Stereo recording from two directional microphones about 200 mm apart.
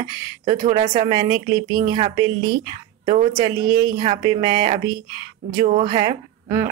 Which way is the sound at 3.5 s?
20° right (ahead or behind).